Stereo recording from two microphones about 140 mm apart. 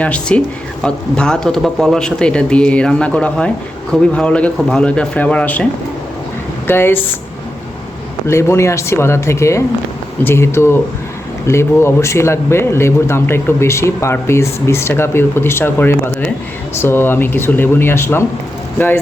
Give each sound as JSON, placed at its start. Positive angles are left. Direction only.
{"t": 0.0, "sound": "speech", "side_deg": 10}
{"t": 6.7, "sound": "speech", "side_deg": 15}
{"t": 8.3, "sound": "speech", "side_deg": 20}